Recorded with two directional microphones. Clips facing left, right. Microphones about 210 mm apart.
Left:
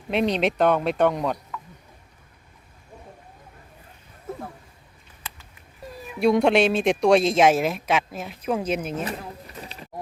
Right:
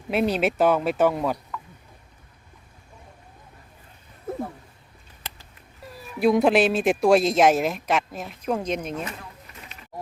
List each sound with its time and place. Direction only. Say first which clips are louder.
0.1 s speech: even; 5° right (ahead or behind)
6.1 s speech: even; centre (ahead or behind)
9.0 s a sound: left 5 dB; 35° left (ahead or behind)